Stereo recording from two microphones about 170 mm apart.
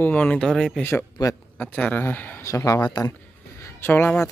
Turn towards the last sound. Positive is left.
turn(degrees=10)  # may be behind; listen again after turning